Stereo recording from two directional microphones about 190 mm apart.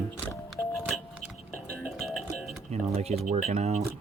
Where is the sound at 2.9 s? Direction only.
30° right (ahead or behind).